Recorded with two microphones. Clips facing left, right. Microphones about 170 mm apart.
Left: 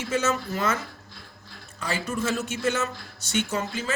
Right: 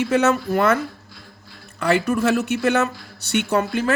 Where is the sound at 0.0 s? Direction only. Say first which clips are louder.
Right 8 dB; 65° right (ahead or behind).